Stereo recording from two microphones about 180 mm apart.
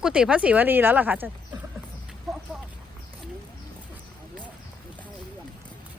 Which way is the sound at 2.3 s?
Centre (ahead or behind).